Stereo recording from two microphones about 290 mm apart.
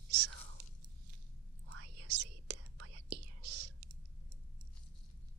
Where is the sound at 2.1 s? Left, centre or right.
Right.